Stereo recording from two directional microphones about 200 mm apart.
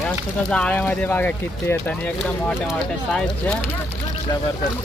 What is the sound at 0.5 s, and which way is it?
Speech, 5° left (ahead or behind).